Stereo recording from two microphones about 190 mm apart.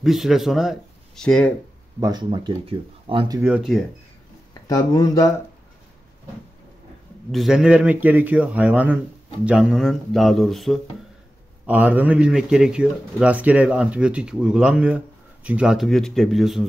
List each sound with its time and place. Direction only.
0.0 s speech: centre (ahead or behind)
2.0 s speech: 20° right (ahead or behind)
3.3 s a man's voice: 10° right (ahead or behind)
4.6 s speech: 20° left (ahead or behind)
7.2 s a man's voice: centre (ahead or behind)